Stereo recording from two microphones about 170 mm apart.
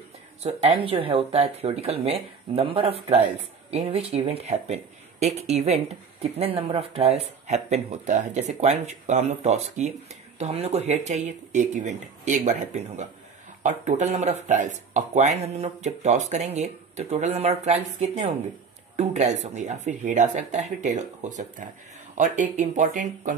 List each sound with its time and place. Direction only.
0.4 s speech: 40° right (ahead or behind)